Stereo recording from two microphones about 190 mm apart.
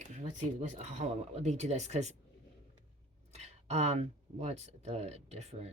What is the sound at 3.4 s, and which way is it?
Speech, 35° right (ahead or behind).